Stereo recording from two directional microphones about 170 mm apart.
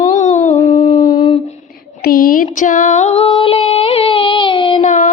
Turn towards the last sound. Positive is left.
turn(degrees=45)  # may be behind; listen again after turning